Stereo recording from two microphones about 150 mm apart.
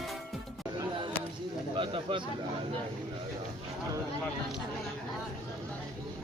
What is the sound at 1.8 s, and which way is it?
Bird, 35° right (ahead or behind).